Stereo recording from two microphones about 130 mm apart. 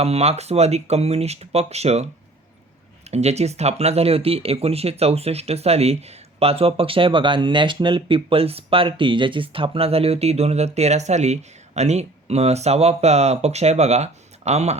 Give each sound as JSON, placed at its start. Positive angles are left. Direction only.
{"t": 0.0, "sound": "speech", "side_deg": -55}
{"t": 3.1, "sound": "speech", "side_deg": -55}